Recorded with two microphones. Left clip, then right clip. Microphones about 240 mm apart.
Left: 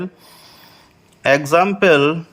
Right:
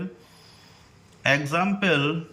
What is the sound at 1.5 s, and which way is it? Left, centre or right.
Speech, left.